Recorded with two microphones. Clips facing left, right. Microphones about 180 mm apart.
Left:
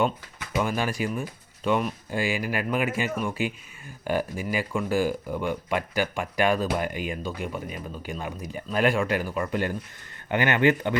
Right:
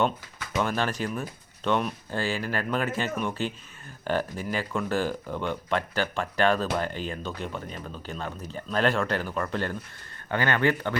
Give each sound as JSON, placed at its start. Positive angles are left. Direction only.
{"t": 0.5, "sound": "speech", "side_deg": 10}